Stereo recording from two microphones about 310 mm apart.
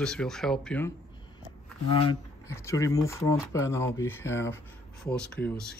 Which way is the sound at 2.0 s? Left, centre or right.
Centre.